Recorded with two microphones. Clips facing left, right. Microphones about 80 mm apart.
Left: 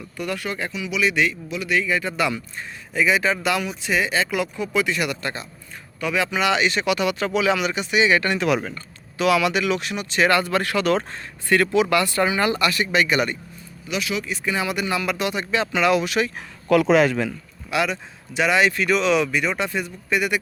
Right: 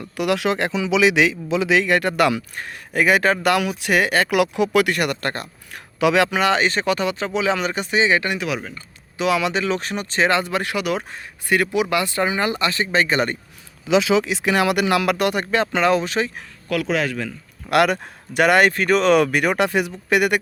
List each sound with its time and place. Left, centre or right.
0.0 s speech: right
6.0 s speech: right
6.4 s speech: right
8.4 s speech: centre
8.7 s speech: right
10.2 s speech: right
13.9 s speech: right
15.1 s speech: right
16.7 s speech: left
17.7 s speech: right